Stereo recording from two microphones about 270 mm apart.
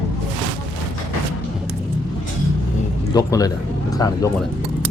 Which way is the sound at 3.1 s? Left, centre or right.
Centre.